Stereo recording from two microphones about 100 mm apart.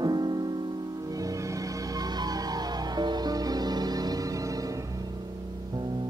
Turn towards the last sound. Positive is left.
turn(degrees=-35)  # may be behind; listen again after turning